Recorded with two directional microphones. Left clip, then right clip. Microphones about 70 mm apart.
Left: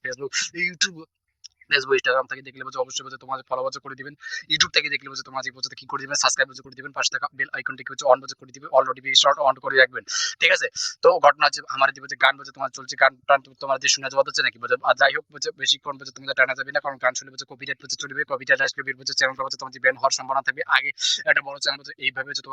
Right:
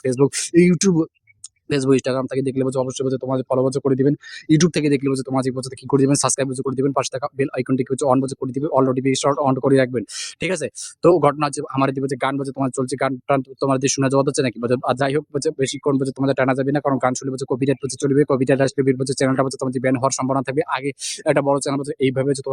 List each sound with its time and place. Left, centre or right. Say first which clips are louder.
0.3 s speech: right 7 dB; right
1.7 s speech: right 1 dB; centre; by 2.6 s right
2.6 s speech: right 7 dB; right
6.4 s speech: right 5 dB; right
11.0 s speech: even; centre; by 13.0 s right
13.0 s speech: left 4 dB; right
15.4 s speech: right 2 dB; right
17.2 s speech: right 11 dB; right
19.7 s speech: left 1 dB; centre
21.4 s speech: right 7 dB; right
21.8 s speech: right 6 dB; right
22.1 s speech: right 9 dB; right